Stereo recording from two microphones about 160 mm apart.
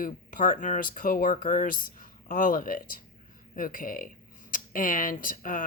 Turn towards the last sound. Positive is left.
turn(degrees=60)  # may be behind; listen again after turning